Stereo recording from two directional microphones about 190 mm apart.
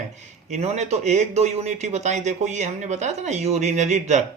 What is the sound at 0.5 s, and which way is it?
Speech, 35° right (ahead or behind).